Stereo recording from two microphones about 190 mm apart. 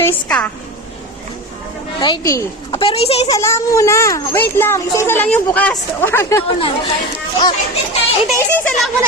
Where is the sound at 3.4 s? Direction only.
15° left (ahead or behind).